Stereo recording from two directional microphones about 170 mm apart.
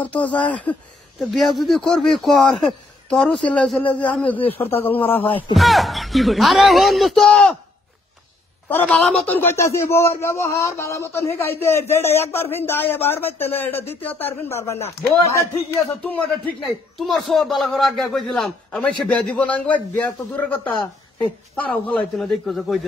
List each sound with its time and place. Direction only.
0.0 s a man's voice: 10° left (ahead or behind)
5.5 s speech: centre (ahead or behind)
8.6 s a man's voice: 10° left (ahead or behind)